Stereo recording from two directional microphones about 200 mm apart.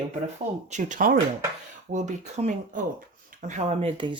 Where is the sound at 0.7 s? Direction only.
40° right (ahead or behind).